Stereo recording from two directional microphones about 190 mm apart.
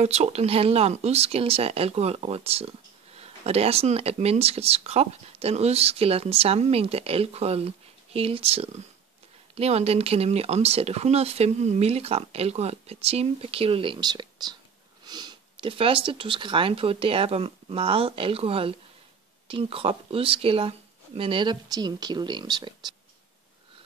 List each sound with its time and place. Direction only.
0.0 s speech: 35° right (ahead or behind)